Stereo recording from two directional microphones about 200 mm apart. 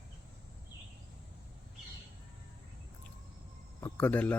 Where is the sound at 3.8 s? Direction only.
10° left (ahead or behind).